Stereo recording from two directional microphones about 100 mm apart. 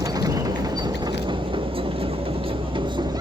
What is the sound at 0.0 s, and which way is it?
Vehicle, 40° right (ahead or behind).